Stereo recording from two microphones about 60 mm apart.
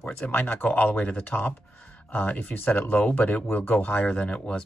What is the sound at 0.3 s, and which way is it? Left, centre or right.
Speech, left.